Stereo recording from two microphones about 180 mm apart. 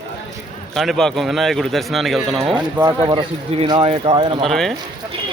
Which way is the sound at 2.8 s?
20° right (ahead or behind).